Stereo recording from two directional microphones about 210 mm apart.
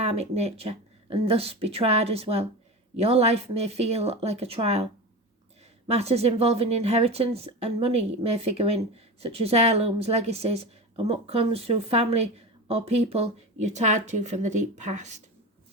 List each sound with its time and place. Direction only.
0.0 s a woman's voice: 30° right (ahead or behind)
5.9 s a woman's voice: 30° right (ahead or behind)